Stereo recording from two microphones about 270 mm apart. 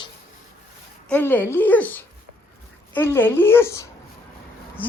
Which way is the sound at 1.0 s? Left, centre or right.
Centre.